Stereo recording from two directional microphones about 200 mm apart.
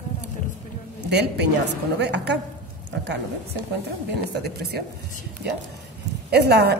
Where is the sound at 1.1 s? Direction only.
55° right (ahead or behind).